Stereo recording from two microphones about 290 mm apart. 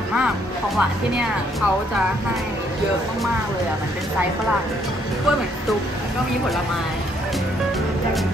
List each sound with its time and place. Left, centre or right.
0.7 s speech: centre